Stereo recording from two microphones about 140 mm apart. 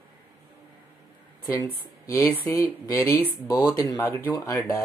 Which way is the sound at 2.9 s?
20° left (ahead or behind).